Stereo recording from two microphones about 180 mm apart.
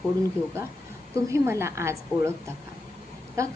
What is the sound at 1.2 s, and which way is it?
A woman's voice, 15° right (ahead or behind).